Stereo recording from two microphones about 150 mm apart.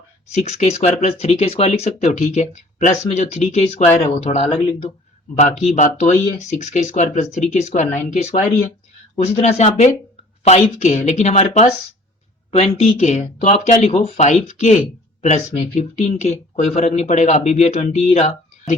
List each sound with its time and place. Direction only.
0.3 s speech: 50° left (ahead or behind)